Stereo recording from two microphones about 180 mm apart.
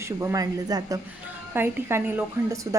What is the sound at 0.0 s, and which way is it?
A woman's voice, 15° right (ahead or behind).